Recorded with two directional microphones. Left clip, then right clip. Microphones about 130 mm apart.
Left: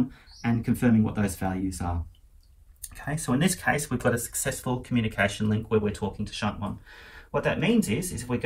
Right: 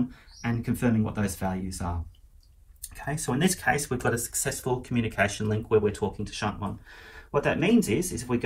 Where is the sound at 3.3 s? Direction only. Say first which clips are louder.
Even; 40° right (ahead or behind).